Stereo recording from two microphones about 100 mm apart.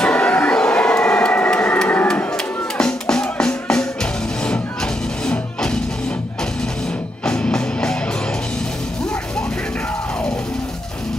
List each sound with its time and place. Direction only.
0.0 s a sound: 10° left (ahead or behind)
5.2 s music: 10° left (ahead or behind)
7.2 s music: 10° left (ahead or behind)